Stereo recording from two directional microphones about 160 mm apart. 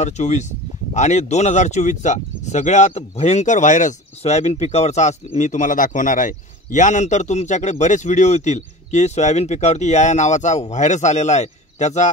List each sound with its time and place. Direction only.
0.0 s speech: 45° left (ahead or behind)